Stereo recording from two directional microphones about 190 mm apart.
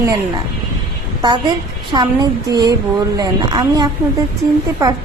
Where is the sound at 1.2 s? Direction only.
20° right (ahead or behind).